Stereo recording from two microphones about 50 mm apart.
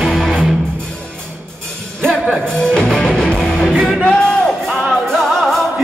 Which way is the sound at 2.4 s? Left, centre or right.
Centre.